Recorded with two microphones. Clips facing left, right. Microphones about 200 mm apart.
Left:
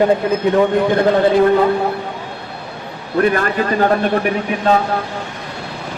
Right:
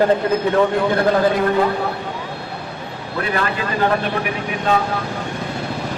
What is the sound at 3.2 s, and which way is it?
Speech, 45° left (ahead or behind).